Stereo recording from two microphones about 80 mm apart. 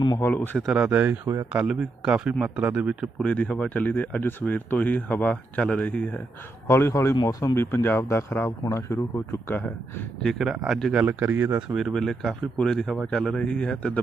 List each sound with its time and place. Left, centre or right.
0.2 s speech: left
0.6 s speech: centre
1.6 s speech: centre
3.2 s speech: centre
6.7 s speech: left
10.2 s speech: centre
10.9 s speech: centre
11.3 s speech: right
11.7 s speech: centre